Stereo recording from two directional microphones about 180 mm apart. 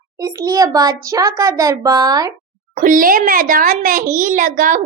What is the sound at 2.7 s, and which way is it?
A child's voice, 50° right (ahead or behind).